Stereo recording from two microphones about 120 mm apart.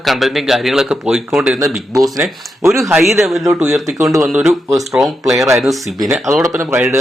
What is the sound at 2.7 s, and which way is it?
Speech, 25° right (ahead or behind).